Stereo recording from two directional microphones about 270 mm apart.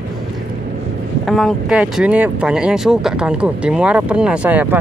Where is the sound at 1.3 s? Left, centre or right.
Centre.